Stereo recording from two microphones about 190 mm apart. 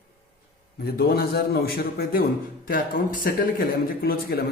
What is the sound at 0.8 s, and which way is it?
Speech, 55° left (ahead or behind).